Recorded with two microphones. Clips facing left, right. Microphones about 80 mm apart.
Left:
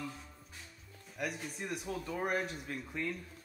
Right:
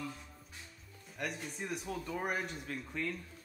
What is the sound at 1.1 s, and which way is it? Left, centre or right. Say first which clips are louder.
A man's voice: left 1 dB; centre.